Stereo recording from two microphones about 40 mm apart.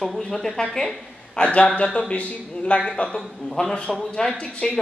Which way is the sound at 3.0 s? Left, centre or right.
Left.